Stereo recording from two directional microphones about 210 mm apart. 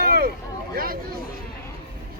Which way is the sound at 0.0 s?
45° right (ahead or behind).